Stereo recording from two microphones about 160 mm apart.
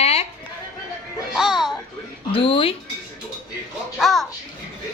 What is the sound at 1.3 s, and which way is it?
Speech, centre (ahead or behind).